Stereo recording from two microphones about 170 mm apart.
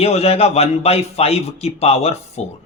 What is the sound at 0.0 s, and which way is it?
A man's voice, 35° left (ahead or behind).